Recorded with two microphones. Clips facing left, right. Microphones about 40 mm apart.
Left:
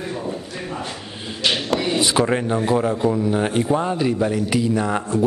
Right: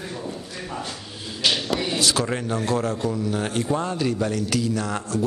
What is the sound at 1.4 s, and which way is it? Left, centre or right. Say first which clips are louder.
A man's voice: left 3 dB; centre.